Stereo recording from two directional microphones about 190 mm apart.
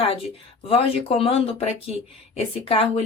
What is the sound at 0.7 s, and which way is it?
Speech, 30° left (ahead or behind).